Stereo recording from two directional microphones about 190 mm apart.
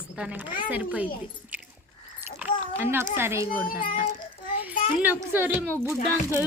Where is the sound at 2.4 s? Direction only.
10° right (ahead or behind).